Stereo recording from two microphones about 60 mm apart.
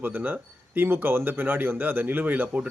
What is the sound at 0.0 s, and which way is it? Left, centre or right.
Speech, right.